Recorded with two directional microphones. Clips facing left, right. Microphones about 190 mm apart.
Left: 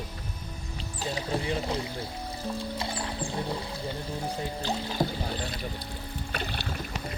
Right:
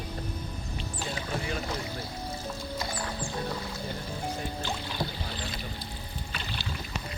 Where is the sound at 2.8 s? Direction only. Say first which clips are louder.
Left 1 dB; 30° left (ahead or behind).